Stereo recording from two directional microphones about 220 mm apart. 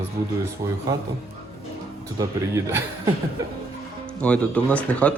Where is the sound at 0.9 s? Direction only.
15° right (ahead or behind).